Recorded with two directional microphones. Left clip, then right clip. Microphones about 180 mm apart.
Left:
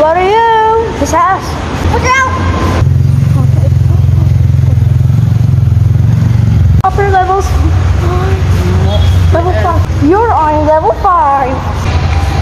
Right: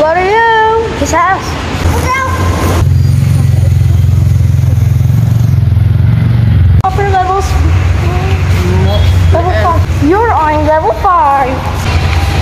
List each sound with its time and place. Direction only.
0.0 s cat: 10° left (ahead or behind)
6.8 s vehicle: 20° left (ahead or behind)
10.0 s a sound: 5° left (ahead or behind)